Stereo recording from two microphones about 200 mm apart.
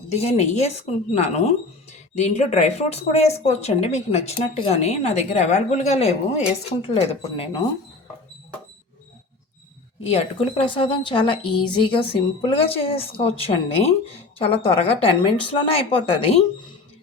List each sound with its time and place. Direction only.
0.1 s speech: 35° left (ahead or behind)
10.1 s a woman's voice: 30° left (ahead or behind)